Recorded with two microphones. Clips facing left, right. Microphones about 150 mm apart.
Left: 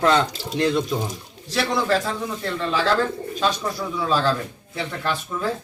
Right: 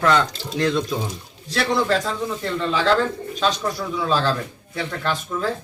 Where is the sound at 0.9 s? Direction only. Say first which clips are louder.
Even; centre (ahead or behind).